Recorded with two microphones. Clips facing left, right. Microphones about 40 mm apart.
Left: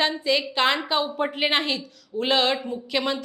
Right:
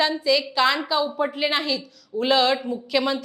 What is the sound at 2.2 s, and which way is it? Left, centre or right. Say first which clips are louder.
A woman's voice: right 2 dB; centre.